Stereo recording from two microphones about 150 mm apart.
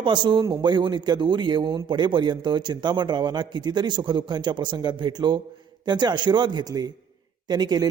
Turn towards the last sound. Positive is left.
turn(degrees=-25)  # may be behind; listen again after turning